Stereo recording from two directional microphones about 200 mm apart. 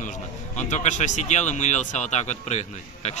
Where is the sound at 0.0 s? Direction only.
40° left (ahead or behind).